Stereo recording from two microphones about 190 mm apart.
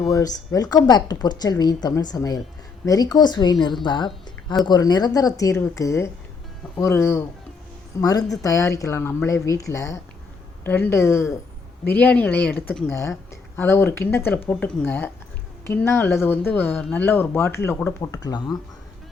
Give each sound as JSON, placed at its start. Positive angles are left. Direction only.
{"t": 0.1, "sound": "a woman's voice", "side_deg": 20}
{"t": 3.8, "sound": "a sound", "side_deg": 25}
{"t": 4.6, "sound": "a woman's voice", "side_deg": 20}